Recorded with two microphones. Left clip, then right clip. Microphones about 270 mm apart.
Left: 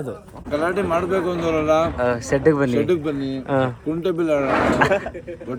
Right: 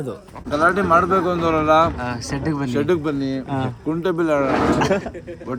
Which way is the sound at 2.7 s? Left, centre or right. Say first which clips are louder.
Even; centre.